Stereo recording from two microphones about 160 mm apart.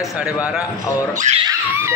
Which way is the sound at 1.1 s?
45° right (ahead or behind).